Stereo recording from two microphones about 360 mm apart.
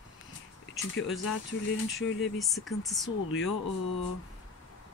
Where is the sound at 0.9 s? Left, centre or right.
Left.